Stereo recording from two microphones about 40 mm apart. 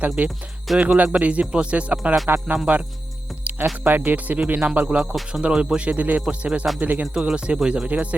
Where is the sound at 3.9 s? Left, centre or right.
Right.